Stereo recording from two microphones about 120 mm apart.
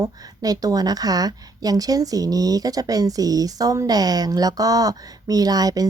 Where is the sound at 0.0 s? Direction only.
30° right (ahead or behind).